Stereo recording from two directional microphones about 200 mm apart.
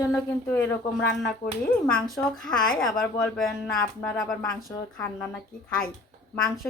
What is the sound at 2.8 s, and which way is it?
Speech, centre (ahead or behind).